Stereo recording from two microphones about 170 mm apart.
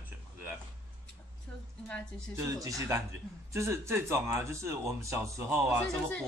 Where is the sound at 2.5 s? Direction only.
20° right (ahead or behind).